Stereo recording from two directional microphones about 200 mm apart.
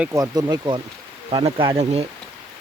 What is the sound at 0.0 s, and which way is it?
Speech, 15° right (ahead or behind).